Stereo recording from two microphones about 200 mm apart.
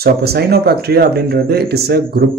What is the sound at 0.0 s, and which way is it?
Speech, 50° right (ahead or behind).